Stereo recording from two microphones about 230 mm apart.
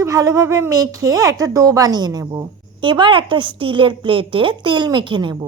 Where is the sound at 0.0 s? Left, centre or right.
Centre.